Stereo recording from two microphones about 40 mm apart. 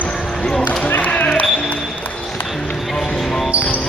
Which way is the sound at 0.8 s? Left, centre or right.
Left.